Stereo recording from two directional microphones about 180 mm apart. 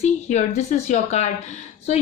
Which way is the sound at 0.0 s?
40° left (ahead or behind).